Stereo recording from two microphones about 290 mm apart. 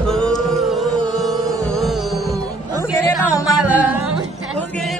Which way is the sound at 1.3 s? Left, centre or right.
Centre.